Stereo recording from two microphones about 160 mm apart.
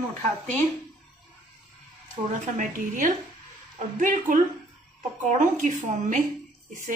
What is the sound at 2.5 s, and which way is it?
A woman's voice, 55° right (ahead or behind).